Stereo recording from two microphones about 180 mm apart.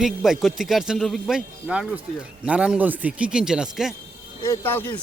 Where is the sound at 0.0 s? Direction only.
Centre (ahead or behind).